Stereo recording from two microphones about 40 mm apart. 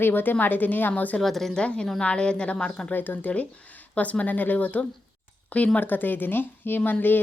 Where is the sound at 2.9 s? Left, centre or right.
Left.